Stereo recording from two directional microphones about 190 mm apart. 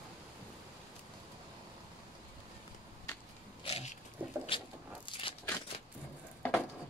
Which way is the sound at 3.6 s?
30° left (ahead or behind).